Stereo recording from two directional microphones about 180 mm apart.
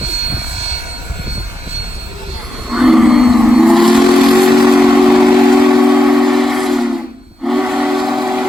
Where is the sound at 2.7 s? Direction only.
Centre (ahead or behind).